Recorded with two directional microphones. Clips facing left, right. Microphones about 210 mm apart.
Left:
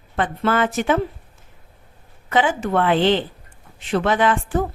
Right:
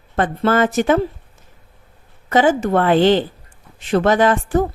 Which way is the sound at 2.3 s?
40° right (ahead or behind).